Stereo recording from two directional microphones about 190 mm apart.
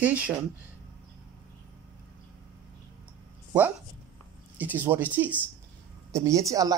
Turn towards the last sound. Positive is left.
turn(degrees=-20)  # may be behind; listen again after turning